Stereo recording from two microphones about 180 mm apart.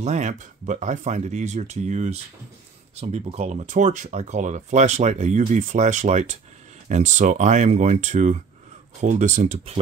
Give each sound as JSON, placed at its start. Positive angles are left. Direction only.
{"t": 0.0, "sound": "speech", "side_deg": -40}